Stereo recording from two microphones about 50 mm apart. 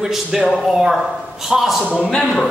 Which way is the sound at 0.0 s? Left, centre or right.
Centre.